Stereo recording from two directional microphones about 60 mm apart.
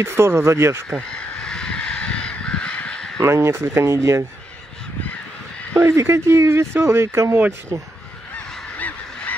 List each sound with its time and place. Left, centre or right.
0.0 s speech: right
1.4 s crow: centre
3.2 s speech: right
5.8 s speech: right
8.7 s goose: left